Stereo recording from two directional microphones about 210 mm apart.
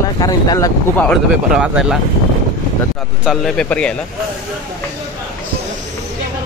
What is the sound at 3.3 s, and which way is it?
Speech, centre (ahead or behind).